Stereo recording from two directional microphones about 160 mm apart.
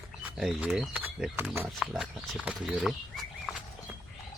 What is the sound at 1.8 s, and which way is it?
Speech, 5° right (ahead or behind).